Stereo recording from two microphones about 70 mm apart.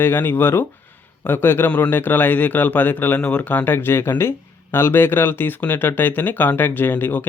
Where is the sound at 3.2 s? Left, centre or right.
Centre.